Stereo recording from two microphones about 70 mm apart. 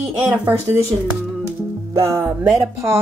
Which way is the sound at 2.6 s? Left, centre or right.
Right.